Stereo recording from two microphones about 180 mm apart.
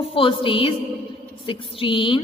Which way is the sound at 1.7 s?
30° left (ahead or behind).